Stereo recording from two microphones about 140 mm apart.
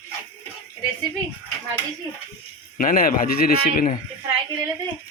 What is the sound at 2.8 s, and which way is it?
Speech, 85° left.